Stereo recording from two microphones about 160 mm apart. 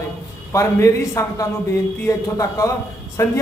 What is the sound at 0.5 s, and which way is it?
A man's voice, 20° left (ahead or behind).